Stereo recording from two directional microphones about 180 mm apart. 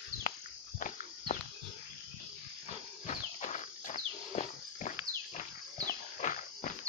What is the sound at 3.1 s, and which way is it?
Cricket, 40° left (ahead or behind).